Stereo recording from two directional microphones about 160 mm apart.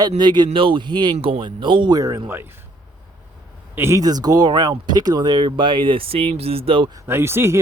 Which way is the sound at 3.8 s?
20° right (ahead or behind).